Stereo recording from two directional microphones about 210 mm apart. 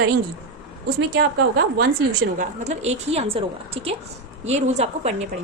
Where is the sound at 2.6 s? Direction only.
30° right (ahead or behind).